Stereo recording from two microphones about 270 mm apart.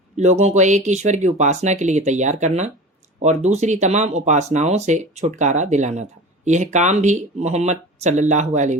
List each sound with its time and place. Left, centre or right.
0.2 s speech: right